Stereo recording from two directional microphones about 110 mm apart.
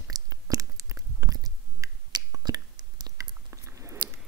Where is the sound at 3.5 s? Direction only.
25° right (ahead or behind).